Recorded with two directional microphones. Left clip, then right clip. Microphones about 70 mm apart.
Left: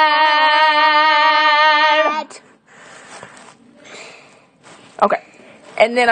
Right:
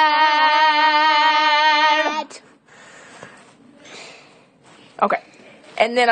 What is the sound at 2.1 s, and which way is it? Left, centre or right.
Child singing, right.